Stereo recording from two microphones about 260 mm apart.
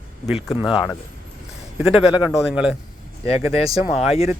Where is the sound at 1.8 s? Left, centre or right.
Centre.